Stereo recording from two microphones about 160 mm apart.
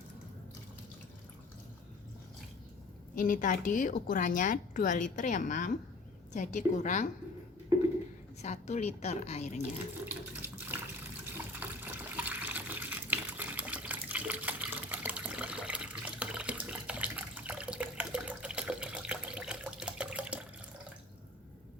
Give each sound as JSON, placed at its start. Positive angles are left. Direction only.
{"t": 3.2, "sound": "a woman's voice", "side_deg": 55}
{"t": 8.4, "sound": "a woman's voice", "side_deg": 45}
{"t": 10.1, "sound": "water", "side_deg": -10}